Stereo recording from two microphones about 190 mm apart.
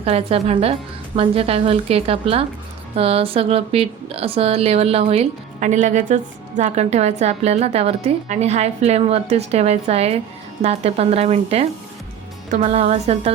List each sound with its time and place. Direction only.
0.0 s speech: 30° right (ahead or behind)